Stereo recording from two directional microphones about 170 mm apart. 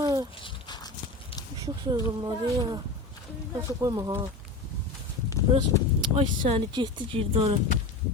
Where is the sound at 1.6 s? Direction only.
25° right (ahead or behind).